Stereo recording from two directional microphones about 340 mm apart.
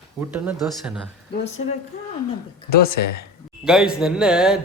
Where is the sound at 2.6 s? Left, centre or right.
Left.